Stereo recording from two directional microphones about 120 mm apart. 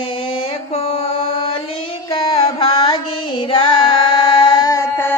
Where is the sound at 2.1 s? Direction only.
45° left (ahead or behind).